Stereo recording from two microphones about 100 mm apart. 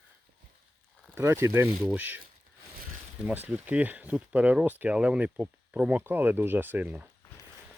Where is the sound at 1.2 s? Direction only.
25° right (ahead or behind).